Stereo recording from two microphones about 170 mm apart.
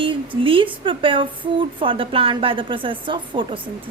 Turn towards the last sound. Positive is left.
turn(degrees=-30)  # may be behind; listen again after turning